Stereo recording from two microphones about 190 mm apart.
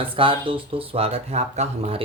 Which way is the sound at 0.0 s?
25° right (ahead or behind).